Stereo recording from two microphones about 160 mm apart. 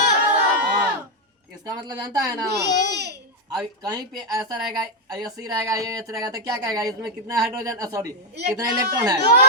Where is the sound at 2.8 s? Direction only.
90° right.